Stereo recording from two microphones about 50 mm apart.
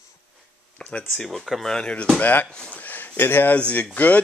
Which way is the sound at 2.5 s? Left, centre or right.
Centre.